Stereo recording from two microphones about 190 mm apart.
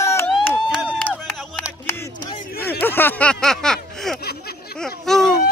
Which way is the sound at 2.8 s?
10° left (ahead or behind).